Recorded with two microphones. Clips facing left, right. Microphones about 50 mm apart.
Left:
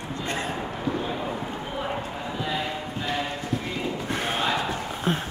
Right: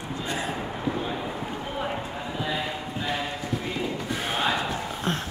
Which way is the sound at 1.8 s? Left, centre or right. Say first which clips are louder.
Left 1 dB; centre.